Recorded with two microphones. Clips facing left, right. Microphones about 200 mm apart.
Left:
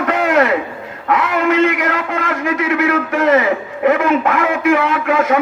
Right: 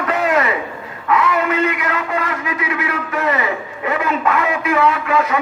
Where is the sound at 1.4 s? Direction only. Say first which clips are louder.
Left 4 dB; 90° left.